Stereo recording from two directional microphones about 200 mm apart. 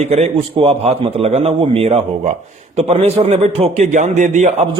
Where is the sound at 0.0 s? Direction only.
30° right (ahead or behind).